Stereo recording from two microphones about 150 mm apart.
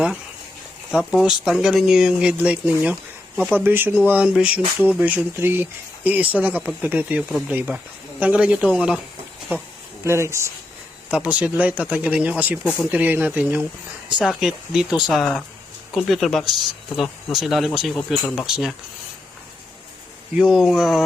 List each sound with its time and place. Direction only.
0.9 s speech: 5° right (ahead or behind)
10.0 s speech: 20° right (ahead or behind); by 18.7 s centre (ahead or behind)
20.3 s speech: 5° right (ahead or behind)